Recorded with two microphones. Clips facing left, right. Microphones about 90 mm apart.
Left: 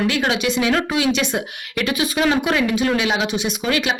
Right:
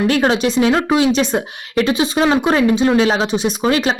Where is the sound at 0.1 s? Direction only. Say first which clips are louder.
Right 5 dB; 35° right (ahead or behind).